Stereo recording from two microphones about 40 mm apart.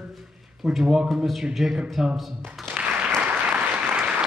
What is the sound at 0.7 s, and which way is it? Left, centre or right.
Speech, centre.